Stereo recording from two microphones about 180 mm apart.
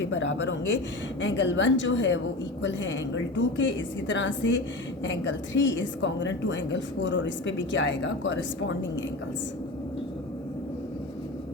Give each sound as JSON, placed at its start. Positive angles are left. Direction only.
{"t": 0.1, "sound": "a woman's voice", "side_deg": 90}